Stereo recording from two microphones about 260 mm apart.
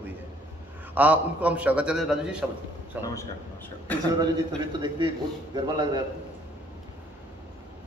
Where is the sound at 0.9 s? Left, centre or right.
Centre.